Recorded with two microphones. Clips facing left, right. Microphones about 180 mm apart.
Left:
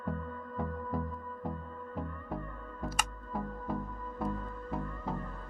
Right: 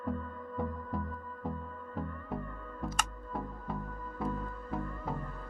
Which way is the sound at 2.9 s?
5° left (ahead or behind).